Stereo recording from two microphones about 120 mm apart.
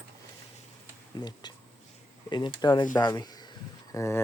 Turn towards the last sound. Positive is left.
turn(degrees=25)  # may be behind; listen again after turning